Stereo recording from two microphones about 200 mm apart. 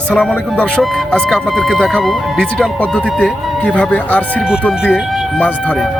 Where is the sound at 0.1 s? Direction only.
5° left (ahead or behind).